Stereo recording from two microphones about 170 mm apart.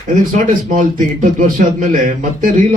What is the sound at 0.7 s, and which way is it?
Speech, 50° right (ahead or behind).